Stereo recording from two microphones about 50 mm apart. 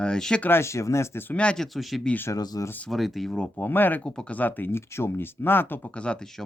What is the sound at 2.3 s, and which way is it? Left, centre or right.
Speech, left.